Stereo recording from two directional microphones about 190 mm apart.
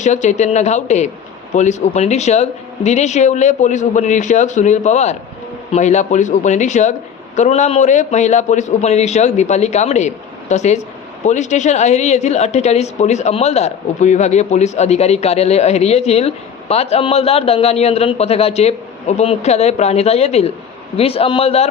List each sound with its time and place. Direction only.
0.0 s a woman's voice: 40° left (ahead or behind)